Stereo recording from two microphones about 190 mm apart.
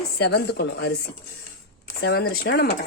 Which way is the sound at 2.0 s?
55° left (ahead or behind).